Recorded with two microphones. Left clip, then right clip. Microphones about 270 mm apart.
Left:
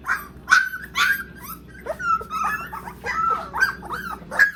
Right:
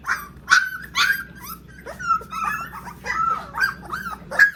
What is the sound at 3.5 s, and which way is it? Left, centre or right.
Dog, left.